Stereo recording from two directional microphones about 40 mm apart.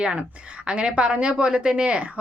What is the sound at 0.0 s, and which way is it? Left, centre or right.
A woman's voice, centre.